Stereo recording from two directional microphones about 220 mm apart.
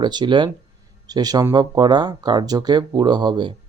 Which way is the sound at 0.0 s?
20° right (ahead or behind).